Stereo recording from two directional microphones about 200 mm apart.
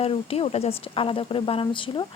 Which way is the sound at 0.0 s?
30° left (ahead or behind).